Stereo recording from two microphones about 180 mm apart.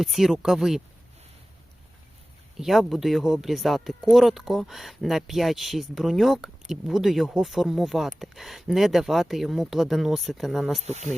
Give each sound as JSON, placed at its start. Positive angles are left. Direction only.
{"t": 0.0, "sound": "speech", "side_deg": 0}
{"t": 2.6, "sound": "speech", "side_deg": 0}
{"t": 10.8, "sound": "speech", "side_deg": -40}